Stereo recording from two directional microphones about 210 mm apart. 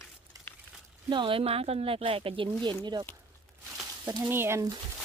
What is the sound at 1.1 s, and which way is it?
Speech, 25° right (ahead or behind).